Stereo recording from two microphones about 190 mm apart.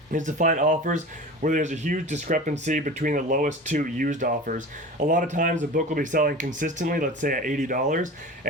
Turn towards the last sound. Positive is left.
turn(degrees=-45)  # may be behind; listen again after turning